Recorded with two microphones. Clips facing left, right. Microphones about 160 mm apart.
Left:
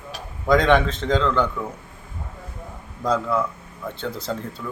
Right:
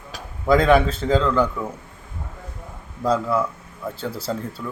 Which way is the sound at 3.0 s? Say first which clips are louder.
Right 1 dB; 5° right (ahead or behind).